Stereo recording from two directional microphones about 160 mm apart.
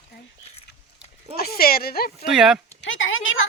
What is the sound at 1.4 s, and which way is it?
Speech, 75° left (ahead or behind).